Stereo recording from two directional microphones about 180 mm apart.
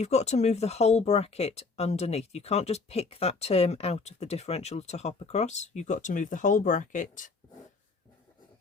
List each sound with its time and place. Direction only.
0.0 s speech: 40° left (ahead or behind)